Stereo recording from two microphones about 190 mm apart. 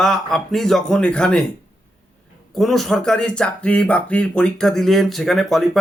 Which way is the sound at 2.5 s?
Centre (ahead or behind).